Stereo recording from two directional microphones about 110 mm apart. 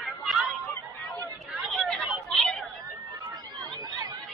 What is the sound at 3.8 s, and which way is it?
Chatter, 35° right (ahead or behind).